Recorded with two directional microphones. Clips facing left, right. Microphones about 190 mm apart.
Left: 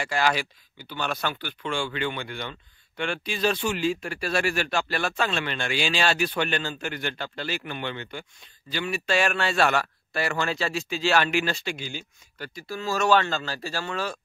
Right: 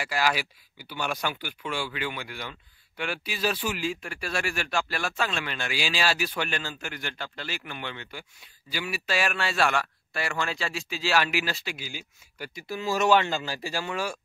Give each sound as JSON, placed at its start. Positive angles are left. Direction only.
{"t": 0.0, "sound": "speech", "side_deg": -5}
{"t": 4.0, "sound": "speech", "side_deg": 35}
{"t": 5.0, "sound": "speech", "side_deg": 0}
{"t": 6.8, "sound": "speech", "side_deg": 30}
{"t": 8.1, "sound": "speech", "side_deg": -5}
{"t": 9.7, "sound": "speech", "side_deg": 40}
{"t": 10.5, "sound": "speech", "side_deg": 0}
{"t": 12.5, "sound": "speech", "side_deg": -15}